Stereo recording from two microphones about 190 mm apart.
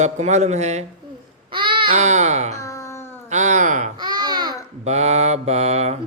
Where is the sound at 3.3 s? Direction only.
40° right (ahead or behind).